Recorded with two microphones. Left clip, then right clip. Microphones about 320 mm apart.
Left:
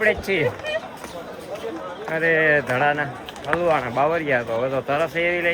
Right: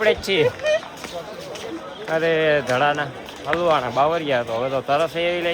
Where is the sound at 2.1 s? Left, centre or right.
Centre.